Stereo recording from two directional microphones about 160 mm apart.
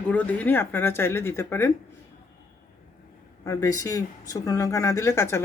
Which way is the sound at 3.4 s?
20° left (ahead or behind).